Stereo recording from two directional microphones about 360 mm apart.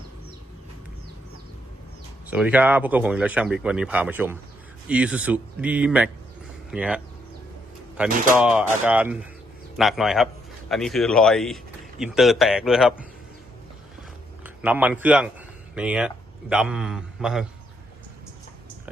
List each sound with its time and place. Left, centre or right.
2.2 s speech: centre
14.4 s speech: centre